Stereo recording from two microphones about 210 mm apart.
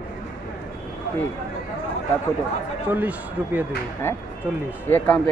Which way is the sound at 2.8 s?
10° right (ahead or behind).